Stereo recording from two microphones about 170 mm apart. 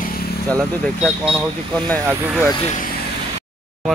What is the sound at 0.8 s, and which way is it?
Speech, centre (ahead or behind).